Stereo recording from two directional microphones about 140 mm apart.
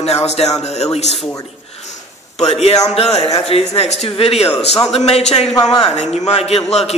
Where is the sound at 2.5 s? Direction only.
45° left (ahead or behind).